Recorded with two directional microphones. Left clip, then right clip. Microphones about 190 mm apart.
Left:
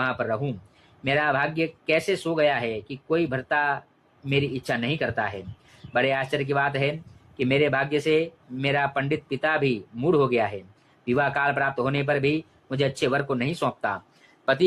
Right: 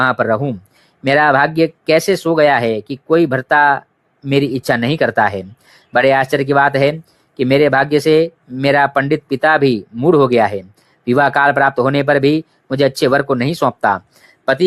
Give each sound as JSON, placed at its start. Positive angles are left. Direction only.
{"t": 0.0, "sound": "speech", "side_deg": -45}